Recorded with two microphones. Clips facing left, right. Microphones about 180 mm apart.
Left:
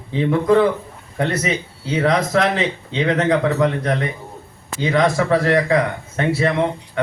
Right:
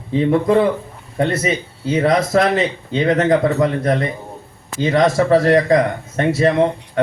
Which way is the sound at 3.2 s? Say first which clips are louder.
Right 2 dB; 40° right (ahead or behind).